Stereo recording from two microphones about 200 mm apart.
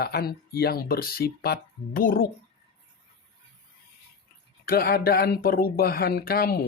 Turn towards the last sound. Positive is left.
turn(degrees=50)  # may be behind; listen again after turning